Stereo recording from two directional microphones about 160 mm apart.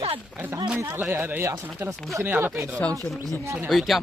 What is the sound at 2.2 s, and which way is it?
A man's voice, 10° right (ahead or behind).